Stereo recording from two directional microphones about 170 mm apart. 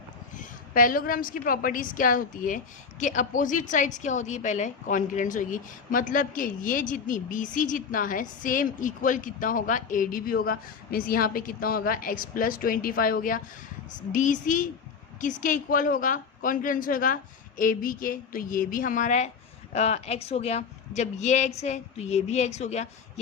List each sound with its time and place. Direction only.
0.3 s a woman's voice: 55° left (ahead or behind)